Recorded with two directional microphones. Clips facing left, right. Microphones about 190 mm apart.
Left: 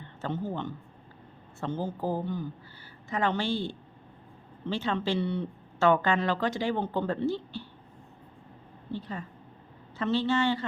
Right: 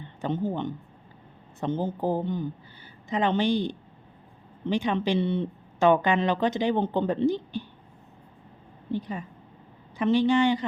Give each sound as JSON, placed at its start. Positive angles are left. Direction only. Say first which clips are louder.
{"t": 0.0, "sound": "a woman's voice", "louder": "right 5 dB", "side_deg": -20}
{"t": 8.9, "sound": "a woman's voice", "louder": "right 5 dB", "side_deg": -15}